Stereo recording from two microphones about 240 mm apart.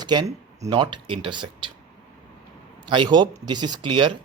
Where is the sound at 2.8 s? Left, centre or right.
Centre.